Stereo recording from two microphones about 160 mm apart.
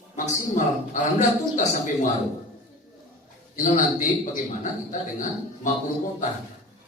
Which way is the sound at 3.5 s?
55° left (ahead or behind).